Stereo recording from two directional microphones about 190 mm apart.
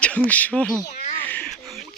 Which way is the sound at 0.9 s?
35° left (ahead or behind).